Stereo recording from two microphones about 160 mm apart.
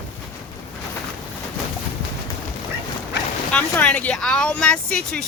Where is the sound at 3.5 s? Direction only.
10° left (ahead or behind).